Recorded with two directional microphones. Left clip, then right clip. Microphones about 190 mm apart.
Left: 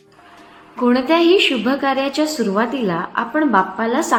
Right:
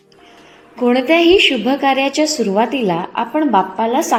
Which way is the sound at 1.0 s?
35° left (ahead or behind).